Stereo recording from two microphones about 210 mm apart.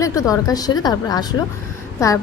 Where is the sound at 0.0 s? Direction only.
15° left (ahead or behind).